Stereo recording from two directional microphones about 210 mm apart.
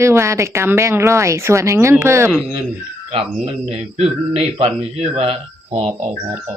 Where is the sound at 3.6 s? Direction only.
30° right (ahead or behind).